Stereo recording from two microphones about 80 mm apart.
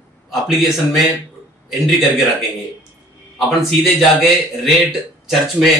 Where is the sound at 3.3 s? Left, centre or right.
Centre.